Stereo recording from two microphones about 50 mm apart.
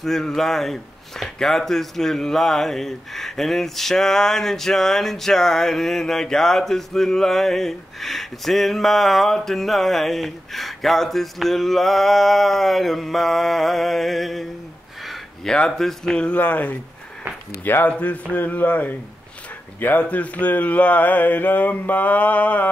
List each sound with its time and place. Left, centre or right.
0.0 s speech: centre
15.4 s speech: centre
16.3 s speech: left
17.9 s a sound: left
18.3 s speech: left